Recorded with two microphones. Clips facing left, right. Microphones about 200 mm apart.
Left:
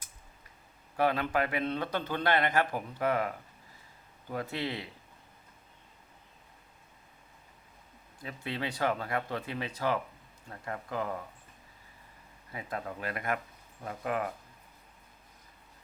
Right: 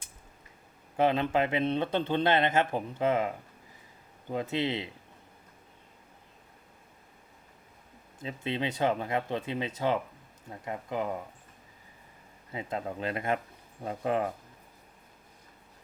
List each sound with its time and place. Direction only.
0.9 s speech: 20° right (ahead or behind)
8.2 s speech: 20° right (ahead or behind)
12.5 s speech: 25° right (ahead or behind)